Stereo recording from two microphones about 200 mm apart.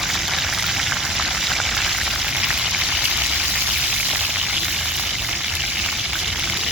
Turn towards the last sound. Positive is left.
turn(degrees=-5)  # may be behind; listen again after turning